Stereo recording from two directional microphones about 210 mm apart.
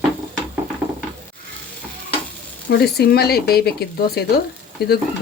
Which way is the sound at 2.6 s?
50° left (ahead or behind).